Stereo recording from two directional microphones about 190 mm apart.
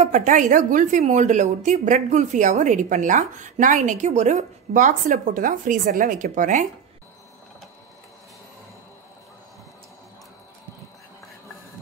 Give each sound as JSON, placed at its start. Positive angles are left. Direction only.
{"t": 0.0, "sound": "a woman's voice", "side_deg": -40}